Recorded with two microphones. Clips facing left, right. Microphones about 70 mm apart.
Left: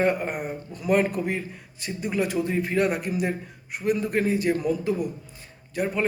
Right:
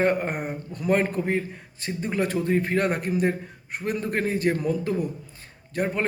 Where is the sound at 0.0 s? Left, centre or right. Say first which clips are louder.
Right 1 dB; right.